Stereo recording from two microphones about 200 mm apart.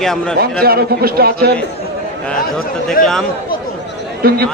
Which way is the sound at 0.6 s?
50° right (ahead or behind).